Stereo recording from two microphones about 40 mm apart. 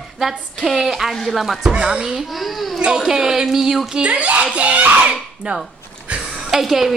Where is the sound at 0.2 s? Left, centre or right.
Centre.